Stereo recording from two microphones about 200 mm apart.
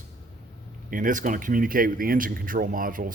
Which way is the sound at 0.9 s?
45° right (ahead or behind).